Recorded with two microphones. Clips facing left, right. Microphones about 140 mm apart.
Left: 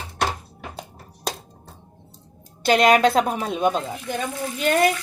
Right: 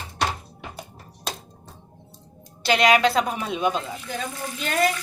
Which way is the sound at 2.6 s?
45° left (ahead or behind).